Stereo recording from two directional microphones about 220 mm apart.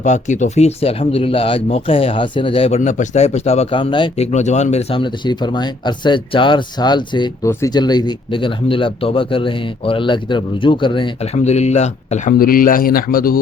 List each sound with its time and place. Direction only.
0.0 s speech: 35° left (ahead or behind)